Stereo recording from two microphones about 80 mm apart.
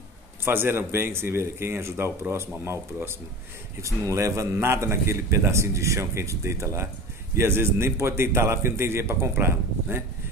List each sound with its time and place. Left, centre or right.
0.5 s a man's voice: right